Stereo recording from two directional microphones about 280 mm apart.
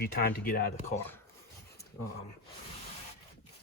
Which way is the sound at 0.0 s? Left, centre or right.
Left.